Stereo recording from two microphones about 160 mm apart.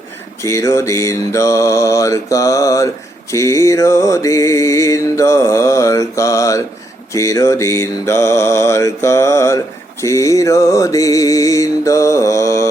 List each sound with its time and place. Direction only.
0.4 s music: 20° left (ahead or behind)
7.1 s mantra: 20° left (ahead or behind)
10.0 s music: 20° left (ahead or behind)